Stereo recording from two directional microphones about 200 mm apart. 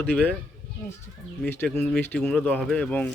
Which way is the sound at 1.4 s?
10° left (ahead or behind).